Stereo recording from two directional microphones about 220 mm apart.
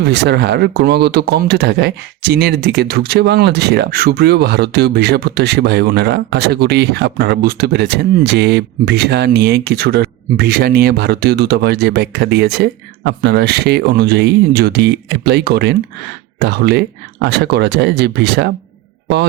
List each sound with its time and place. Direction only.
0.0 s speech: 50° right (ahead or behind)